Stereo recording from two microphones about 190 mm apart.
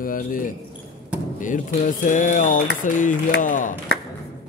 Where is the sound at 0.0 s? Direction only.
45° left (ahead or behind).